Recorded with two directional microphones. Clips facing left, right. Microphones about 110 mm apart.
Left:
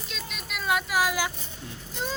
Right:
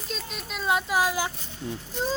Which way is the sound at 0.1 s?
30° right (ahead or behind).